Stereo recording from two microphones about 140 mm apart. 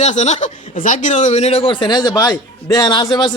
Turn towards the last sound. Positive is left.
turn(degrees=30)  # may be behind; listen again after turning